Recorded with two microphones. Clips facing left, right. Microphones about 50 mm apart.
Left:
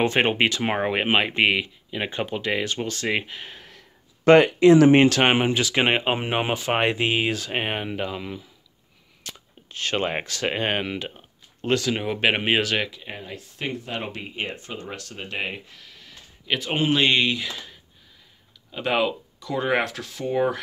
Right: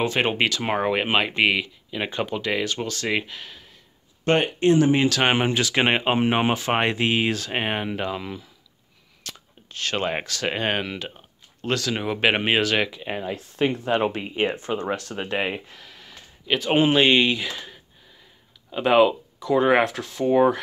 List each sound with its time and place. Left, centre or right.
0.0 s speech: left
3.5 s a sound: left
4.4 s speech: left
5.4 s speech: centre
9.2 s speech: centre
12.0 s speech: centre
13.0 s speech: right
15.1 s speech: right
15.8 s a sound: centre
16.7 s speech: centre